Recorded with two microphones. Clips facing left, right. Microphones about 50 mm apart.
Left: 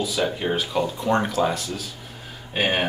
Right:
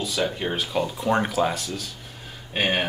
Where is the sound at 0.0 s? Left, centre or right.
Centre.